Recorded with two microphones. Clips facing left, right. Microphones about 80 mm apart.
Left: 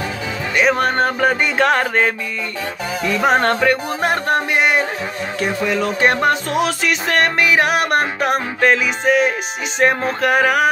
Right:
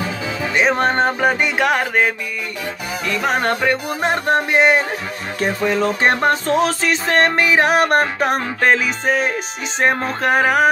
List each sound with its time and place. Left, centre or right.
0.6 s music: right; by 2.1 s centre
3.1 s music: centre
3.3 s music: centre
4.0 s music: right